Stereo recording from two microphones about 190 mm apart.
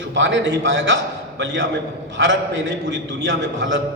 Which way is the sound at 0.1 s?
75° right (ahead or behind).